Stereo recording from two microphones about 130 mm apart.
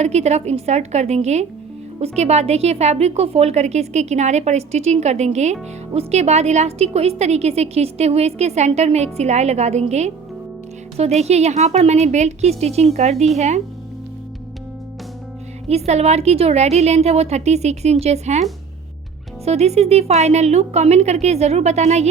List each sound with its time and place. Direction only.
0.0 s a woman's voice: 60° right (ahead or behind)
10.9 s a woman's voice: 55° right (ahead or behind)
15.7 s a woman's voice: 55° right (ahead or behind)
19.5 s a woman's voice: 55° right (ahead or behind)